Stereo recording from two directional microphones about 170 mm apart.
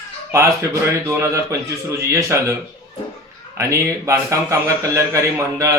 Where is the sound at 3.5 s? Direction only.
15° right (ahead or behind).